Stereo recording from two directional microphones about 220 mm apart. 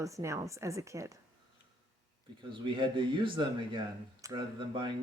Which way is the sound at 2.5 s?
20° right (ahead or behind).